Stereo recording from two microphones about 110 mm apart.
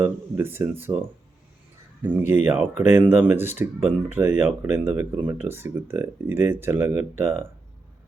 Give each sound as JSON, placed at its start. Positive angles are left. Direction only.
{"t": 0.0, "sound": "speech", "side_deg": -20}
{"t": 2.1, "sound": "speech", "side_deg": -20}